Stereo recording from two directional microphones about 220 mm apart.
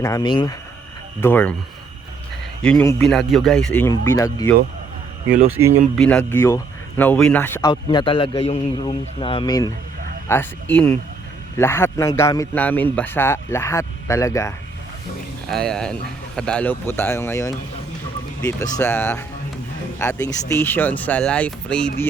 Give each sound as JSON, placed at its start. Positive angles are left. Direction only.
{"t": 0.0, "sound": "a man's voice", "side_deg": 15}
{"t": 1.2, "sound": "a man's voice", "side_deg": 10}
{"t": 2.6, "sound": "speech", "side_deg": 5}
{"t": 5.6, "sound": "speech", "side_deg": -65}
{"t": 6.0, "sound": "a man's voice", "side_deg": 5}
{"t": 7.7, "sound": "a man's voice", "side_deg": 20}
{"t": 15.4, "sound": "speech", "side_deg": 0}
{"t": 18.8, "sound": "a man's voice", "side_deg": 10}